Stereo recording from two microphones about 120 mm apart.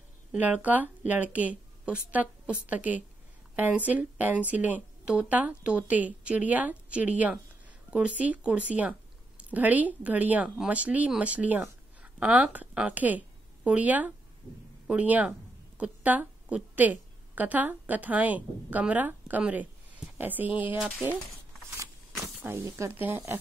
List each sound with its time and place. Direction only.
0.3 s a woman's voice: 15° right (ahead or behind)
22.4 s speech: 15° right (ahead or behind)